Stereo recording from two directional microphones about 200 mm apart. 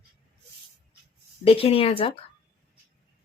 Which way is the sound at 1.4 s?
30° left (ahead or behind).